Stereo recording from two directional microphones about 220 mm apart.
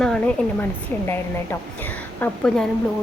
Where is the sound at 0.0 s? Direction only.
5° left (ahead or behind).